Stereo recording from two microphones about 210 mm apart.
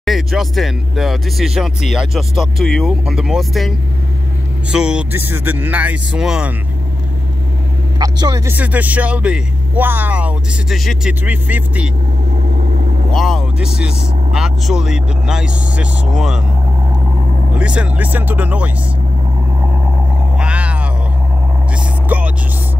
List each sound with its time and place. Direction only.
0.0 s speech: centre (ahead or behind)
8.0 s speech: 20° right (ahead or behind)
8.5 s speech: 5° right (ahead or behind)
13.1 s speech: centre (ahead or behind)
17.6 s speech: 5° right (ahead or behind)
20.3 s a sound: 5° right (ahead or behind)
22.1 s vehicle: 5° right (ahead or behind)